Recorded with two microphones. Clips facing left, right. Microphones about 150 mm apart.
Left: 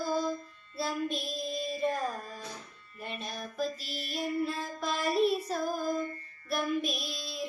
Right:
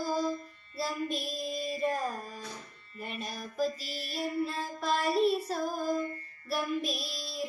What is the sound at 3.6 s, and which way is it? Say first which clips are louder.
Child singing: right 2 dB; 10° right (ahead or behind).